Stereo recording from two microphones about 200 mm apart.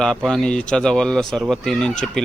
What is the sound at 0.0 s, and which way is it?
Speech, 5° left (ahead or behind).